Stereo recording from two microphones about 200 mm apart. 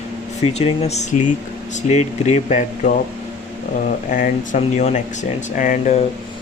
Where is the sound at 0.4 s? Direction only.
30° left (ahead or behind).